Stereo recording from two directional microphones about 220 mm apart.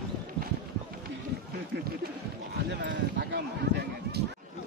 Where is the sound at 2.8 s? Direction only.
50° right (ahead or behind).